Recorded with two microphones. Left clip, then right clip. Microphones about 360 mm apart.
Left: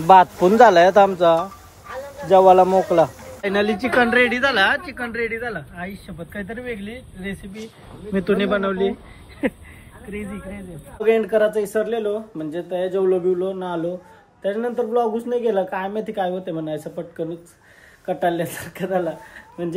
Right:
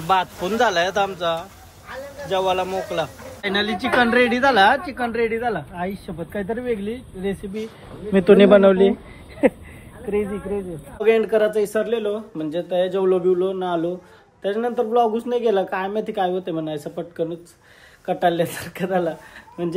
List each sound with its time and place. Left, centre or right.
0.0 s speech: centre
3.4 s a woman's voice: centre
10.1 s speech: centre